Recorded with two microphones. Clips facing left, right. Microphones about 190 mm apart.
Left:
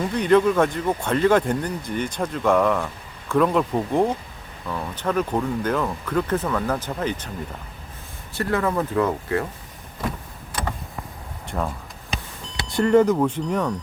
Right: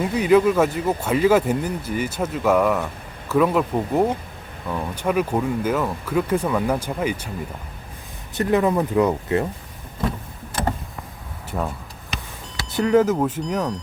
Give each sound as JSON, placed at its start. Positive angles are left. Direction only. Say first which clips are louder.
{"t": 0.0, "sound": "speech", "louder": "right 1 dB", "side_deg": -5}
{"t": 8.4, "sound": "speech", "louder": "right 4 dB", "side_deg": -20}
{"t": 11.5, "sound": "speech", "louder": "right 1 dB", "side_deg": -5}